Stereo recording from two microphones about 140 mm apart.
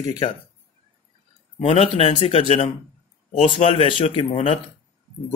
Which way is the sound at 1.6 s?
45° left (ahead or behind).